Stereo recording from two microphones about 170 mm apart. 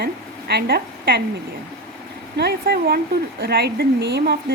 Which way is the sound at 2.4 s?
70° right (ahead or behind).